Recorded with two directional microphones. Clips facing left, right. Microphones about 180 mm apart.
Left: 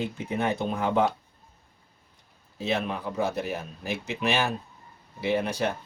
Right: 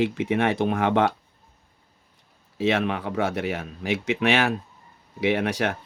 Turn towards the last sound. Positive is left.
turn(degrees=-85)